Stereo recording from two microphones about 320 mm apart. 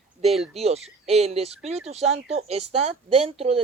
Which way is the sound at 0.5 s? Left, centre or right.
Centre.